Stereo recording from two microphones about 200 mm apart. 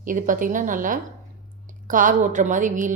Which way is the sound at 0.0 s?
40° right (ahead or behind).